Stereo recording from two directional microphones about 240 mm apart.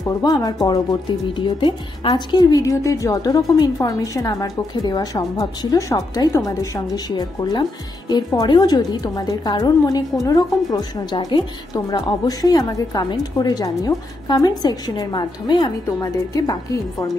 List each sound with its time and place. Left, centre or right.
0.2 s a woman's voice: centre